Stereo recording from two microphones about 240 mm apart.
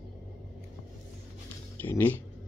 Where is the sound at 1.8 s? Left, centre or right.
Centre.